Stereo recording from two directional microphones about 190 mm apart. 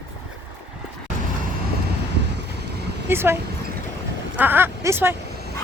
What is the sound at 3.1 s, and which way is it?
Speech, 10° right (ahead or behind).